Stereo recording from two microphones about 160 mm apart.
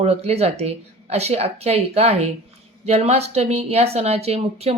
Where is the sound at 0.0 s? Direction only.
40° right (ahead or behind).